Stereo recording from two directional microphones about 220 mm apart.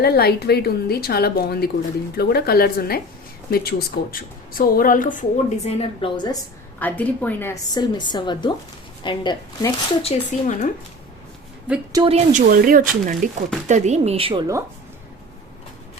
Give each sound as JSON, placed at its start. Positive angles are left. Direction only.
{"t": 0.0, "sound": "a woman's voice", "side_deg": 45}
{"t": 5.6, "sound": "speech", "side_deg": 20}
{"t": 6.7, "sound": "a woman's voice", "side_deg": 5}
{"t": 11.9, "sound": "speech", "side_deg": -15}
{"t": 12.1, "sound": "speech", "side_deg": -35}